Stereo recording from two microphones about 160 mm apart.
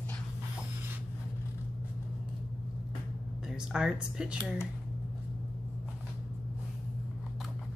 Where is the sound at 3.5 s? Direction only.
5° right (ahead or behind).